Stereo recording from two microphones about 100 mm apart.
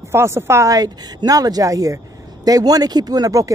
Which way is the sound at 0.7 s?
40° right (ahead or behind).